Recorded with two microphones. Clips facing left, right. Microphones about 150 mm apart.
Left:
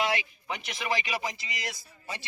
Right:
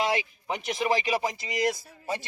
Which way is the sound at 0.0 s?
40° right (ahead or behind).